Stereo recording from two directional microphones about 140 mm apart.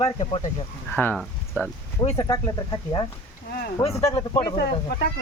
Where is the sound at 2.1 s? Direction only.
30° left (ahead or behind).